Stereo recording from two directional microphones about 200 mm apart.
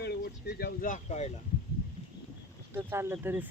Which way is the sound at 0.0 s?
50° left (ahead or behind).